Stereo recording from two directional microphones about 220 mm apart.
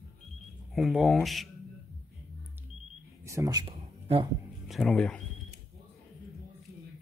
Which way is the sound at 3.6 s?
25° right (ahead or behind).